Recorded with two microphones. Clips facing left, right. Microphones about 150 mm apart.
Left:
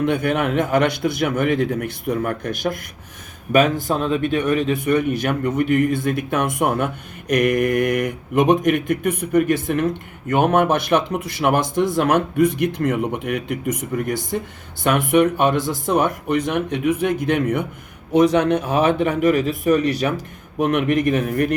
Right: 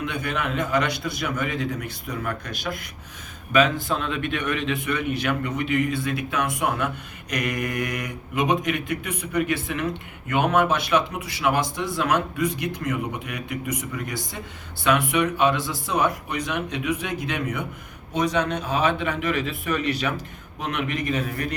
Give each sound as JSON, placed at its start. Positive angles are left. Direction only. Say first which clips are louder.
{"t": 0.0, "sound": "a man's voice", "louder": "left 8 dB", "side_deg": 55}
{"t": 20.6, "sound": "a man's voice", "louder": "left 10 dB", "side_deg": 50}